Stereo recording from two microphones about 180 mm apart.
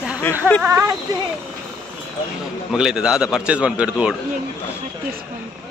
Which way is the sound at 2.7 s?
5° right (ahead or behind).